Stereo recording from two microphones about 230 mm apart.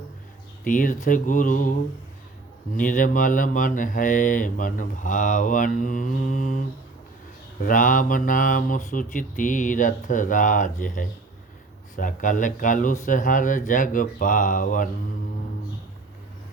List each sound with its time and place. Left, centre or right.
0.6 s speech: left
2.7 s speech: left